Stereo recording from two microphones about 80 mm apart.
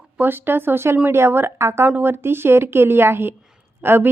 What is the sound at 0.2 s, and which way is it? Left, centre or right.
A woman's voice, right.